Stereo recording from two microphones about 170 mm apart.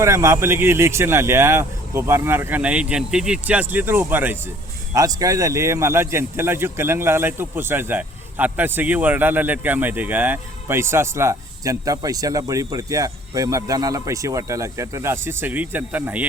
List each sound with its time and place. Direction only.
0.0 s speech: 15° right (ahead or behind)